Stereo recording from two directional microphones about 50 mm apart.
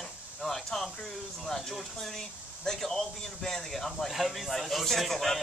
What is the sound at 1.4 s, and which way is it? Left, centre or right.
Speech, centre.